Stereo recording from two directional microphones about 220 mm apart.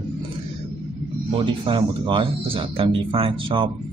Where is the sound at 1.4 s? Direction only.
25° right (ahead or behind).